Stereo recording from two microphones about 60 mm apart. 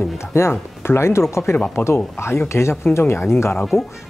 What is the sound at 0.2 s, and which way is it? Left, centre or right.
Speech, left.